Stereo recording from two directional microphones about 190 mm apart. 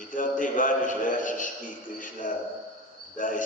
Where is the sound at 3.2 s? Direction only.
45° left (ahead or behind).